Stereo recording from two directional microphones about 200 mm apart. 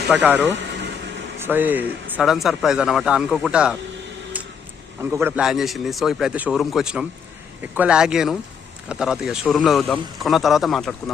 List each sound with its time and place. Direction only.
0.1 s speech: 5° right (ahead or behind)
5.1 s speech: 5° right (ahead or behind)